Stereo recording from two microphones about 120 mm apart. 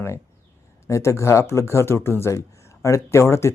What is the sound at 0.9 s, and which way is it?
Speech, 25° left (ahead or behind).